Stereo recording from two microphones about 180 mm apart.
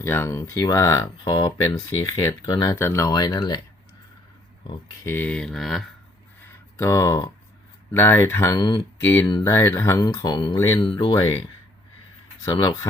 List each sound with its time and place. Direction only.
0.0 s speech: 15° left (ahead or behind)
5.0 s speech: 10° left (ahead or behind)
6.7 s speech: 15° left (ahead or behind)
12.5 s speech: 20° left (ahead or behind)